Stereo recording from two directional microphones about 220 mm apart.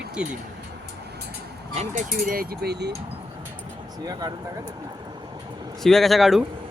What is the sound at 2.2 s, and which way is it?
Speech, 40° right (ahead or behind).